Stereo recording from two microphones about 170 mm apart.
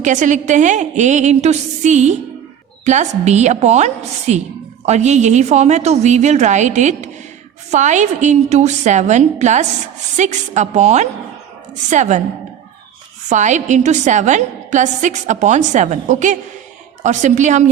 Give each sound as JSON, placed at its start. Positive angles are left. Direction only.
{"t": 0.0, "sound": "a woman's voice", "side_deg": -45}
{"t": 13.3, "sound": "a woman's voice", "side_deg": -45}